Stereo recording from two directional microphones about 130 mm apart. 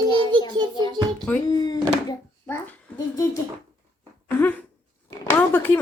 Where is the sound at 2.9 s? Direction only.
25° left (ahead or behind).